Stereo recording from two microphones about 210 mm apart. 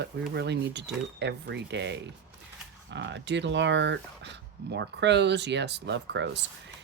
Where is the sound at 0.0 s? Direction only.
55° right (ahead or behind).